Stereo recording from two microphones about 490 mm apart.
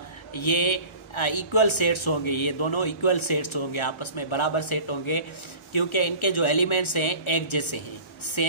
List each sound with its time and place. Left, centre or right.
0.3 s speech: left